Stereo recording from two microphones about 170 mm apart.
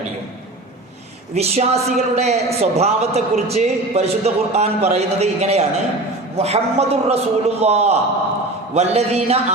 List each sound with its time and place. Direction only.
1.4 s a man's voice: 40° right (ahead or behind)